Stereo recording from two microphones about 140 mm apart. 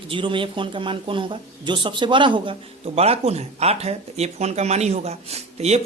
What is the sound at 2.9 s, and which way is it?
Speech, 45° right (ahead or behind).